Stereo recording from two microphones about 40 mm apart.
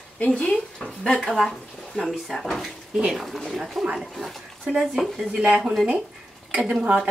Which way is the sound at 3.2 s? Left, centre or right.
Centre.